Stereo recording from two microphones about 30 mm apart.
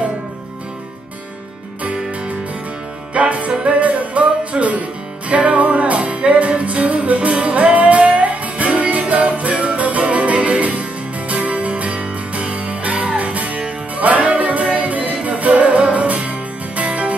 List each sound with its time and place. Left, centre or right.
3.2 s music: right